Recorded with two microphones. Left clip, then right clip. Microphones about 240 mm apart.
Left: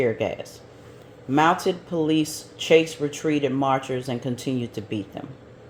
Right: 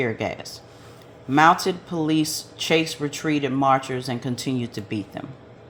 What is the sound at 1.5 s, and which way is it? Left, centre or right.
Speech, right.